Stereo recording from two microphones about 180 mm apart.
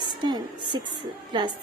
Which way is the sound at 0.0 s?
25° right (ahead or behind).